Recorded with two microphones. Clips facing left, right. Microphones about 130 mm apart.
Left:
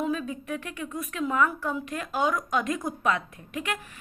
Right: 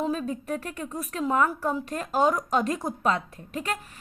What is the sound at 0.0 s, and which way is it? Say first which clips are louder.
A woman's voice: right 1 dB; 35° right (ahead or behind).